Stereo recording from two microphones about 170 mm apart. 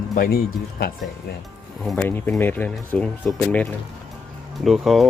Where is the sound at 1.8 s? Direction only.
10° left (ahead or behind).